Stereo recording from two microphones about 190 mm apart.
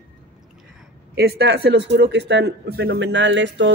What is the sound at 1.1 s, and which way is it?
Speech, 60° right (ahead or behind).